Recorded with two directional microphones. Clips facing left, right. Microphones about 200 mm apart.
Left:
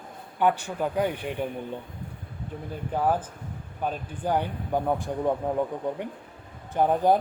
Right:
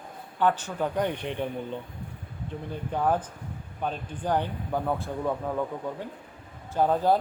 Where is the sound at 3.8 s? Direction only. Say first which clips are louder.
Left 1 dB; 10° left (ahead or behind).